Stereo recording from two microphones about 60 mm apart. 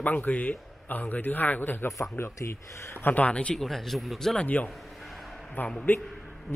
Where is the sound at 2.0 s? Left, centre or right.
Left.